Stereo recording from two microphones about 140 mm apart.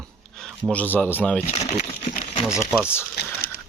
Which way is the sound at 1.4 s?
50° left (ahead or behind).